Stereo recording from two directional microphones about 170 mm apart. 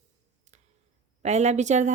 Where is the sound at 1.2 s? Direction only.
40° right (ahead or behind).